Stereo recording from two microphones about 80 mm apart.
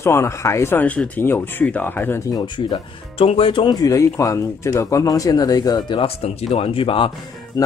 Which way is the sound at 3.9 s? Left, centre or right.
Left.